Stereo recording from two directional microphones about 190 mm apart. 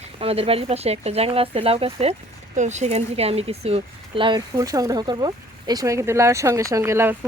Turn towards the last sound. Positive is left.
turn(degrees=-10)  # may be behind; listen again after turning